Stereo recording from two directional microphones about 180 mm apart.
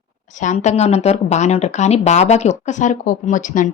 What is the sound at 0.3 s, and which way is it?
A woman's voice, 40° left (ahead or behind).